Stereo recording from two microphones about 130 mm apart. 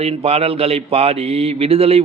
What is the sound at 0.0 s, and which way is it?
Mantra, 50° right (ahead or behind).